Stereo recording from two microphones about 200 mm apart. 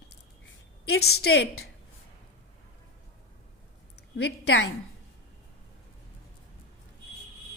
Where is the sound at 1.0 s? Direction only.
55° left (ahead or behind).